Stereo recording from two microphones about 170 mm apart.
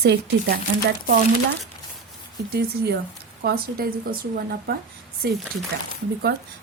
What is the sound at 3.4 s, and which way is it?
A woman's voice, 60° right (ahead or behind).